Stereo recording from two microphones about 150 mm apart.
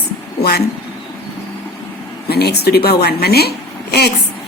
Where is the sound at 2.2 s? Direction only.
90° left.